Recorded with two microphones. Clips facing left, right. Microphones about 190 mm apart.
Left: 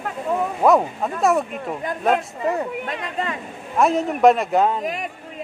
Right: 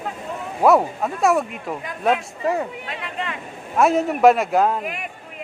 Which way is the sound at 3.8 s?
5° right (ahead or behind).